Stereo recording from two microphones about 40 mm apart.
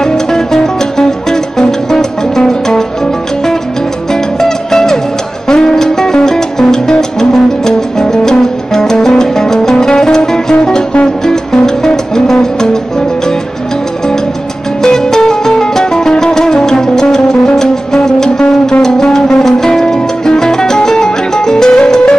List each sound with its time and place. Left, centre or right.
0.0 s music: centre
4.1 s music: centre
14.8 s music: centre